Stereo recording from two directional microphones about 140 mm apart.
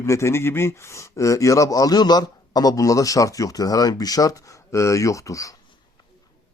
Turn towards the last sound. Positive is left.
turn(degrees=25)  # may be behind; listen again after turning